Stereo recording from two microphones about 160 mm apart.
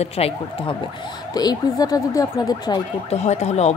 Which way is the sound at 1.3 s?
25° left (ahead or behind).